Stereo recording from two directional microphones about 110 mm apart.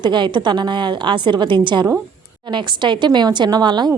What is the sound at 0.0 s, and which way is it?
A woman's voice, 45° right (ahead or behind).